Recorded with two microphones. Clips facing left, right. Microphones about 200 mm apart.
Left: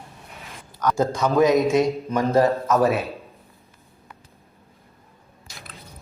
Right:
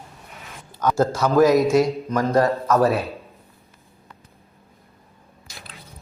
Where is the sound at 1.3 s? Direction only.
Centre (ahead or behind).